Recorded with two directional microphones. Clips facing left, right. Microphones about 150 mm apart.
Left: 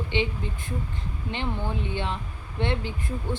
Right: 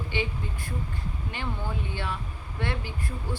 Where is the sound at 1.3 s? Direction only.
20° left (ahead or behind).